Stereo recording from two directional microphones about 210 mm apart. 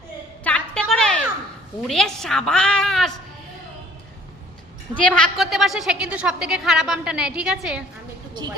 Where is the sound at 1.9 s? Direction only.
Centre (ahead or behind).